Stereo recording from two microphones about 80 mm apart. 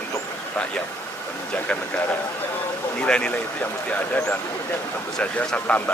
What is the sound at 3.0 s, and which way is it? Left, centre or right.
Speech, centre.